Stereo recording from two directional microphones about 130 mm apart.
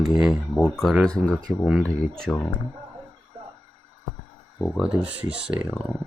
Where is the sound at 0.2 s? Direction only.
5° right (ahead or behind).